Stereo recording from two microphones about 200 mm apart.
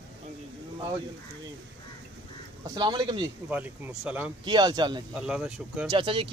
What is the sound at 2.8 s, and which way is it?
Speech, 20° right (ahead or behind).